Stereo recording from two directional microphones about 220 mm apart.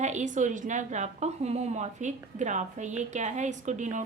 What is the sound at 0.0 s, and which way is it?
A woman's voice, 35° right (ahead or behind).